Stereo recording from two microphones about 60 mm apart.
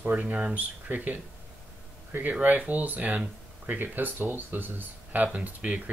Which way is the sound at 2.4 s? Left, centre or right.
Right.